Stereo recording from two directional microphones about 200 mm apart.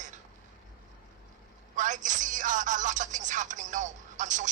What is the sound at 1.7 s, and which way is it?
Speech, 40° right (ahead or behind).